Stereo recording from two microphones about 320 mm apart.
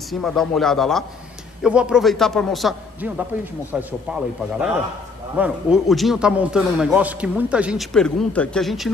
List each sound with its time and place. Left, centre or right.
0.1 s a man's voice: centre